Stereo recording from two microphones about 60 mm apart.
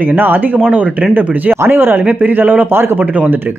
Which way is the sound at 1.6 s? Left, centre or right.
Right.